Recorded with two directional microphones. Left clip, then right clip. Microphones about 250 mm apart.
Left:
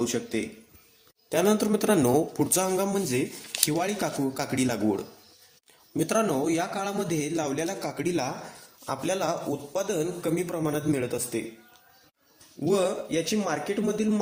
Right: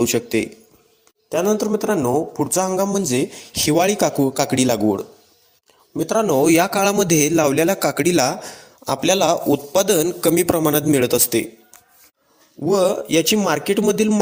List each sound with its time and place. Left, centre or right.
0.0 s a man's voice: right
1.3 s a man's voice: centre; by 4.9 s right
5.9 s speech: centre
6.2 s a man's voice: right
12.6 s speech: centre
12.9 s speech: right